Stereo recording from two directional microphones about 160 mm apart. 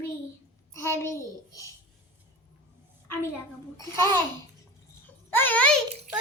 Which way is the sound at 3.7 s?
20° left (ahead or behind).